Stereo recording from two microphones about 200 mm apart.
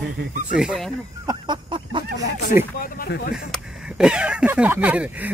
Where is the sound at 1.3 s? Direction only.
25° right (ahead or behind).